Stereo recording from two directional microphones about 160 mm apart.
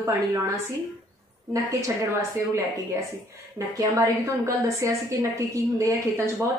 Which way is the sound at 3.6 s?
20° right (ahead or behind).